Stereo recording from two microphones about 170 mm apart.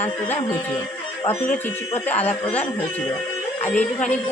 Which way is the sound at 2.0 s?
10° left (ahead or behind).